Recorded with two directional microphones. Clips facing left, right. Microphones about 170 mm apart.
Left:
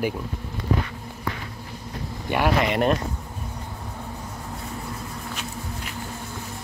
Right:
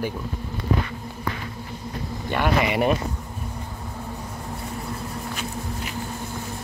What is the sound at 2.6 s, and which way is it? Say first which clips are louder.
Speech: right 2 dB; 5° right (ahead or behind).